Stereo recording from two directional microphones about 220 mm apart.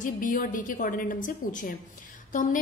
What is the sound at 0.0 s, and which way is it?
A woman's voice, 40° left (ahead or behind).